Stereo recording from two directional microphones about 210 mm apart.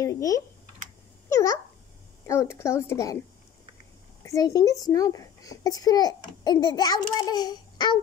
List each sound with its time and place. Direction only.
0.0 s speech: 15° left (ahead or behind)
2.2 s speech: 15° left (ahead or behind)
4.2 s a child's voice: 15° left (ahead or behind)